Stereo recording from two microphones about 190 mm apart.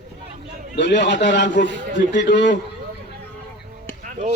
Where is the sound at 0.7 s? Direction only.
65° left (ahead or behind).